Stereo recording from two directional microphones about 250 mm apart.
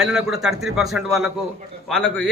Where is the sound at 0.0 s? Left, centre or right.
Centre.